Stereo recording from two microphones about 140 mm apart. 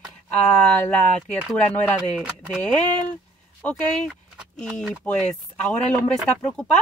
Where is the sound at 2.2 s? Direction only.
10° right (ahead or behind).